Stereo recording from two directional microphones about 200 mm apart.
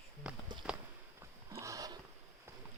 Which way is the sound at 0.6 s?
Centre (ahead or behind).